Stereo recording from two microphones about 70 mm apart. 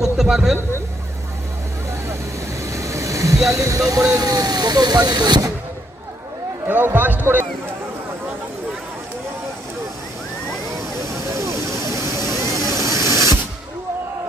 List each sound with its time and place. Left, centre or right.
0.0 s a man's voice: centre
2.6 s vehicle: right
3.5 s speech: right
4.1 s speech: right
6.7 s a man's voice: right
11.1 s vehicle: right